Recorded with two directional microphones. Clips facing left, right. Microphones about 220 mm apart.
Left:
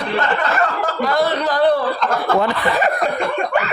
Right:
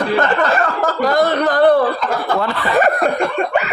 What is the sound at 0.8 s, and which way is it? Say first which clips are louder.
Speech: right 5 dB; 40° right (ahead or behind).